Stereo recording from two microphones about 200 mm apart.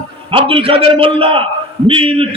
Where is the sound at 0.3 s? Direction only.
25° right (ahead or behind).